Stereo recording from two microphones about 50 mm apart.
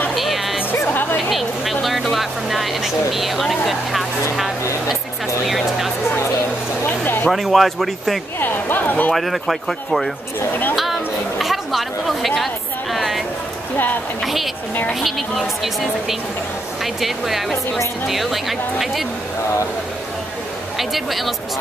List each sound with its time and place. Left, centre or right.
0.1 s music: centre
1.3 s a sound: centre
2.1 s vehicle: centre
7.2 s speech: centre
8.4 s speech: left
9.1 s speech: centre
10.8 s chatter: centre
12.9 s a sound: centre
14.2 s speech: centre
20.7 s speech: centre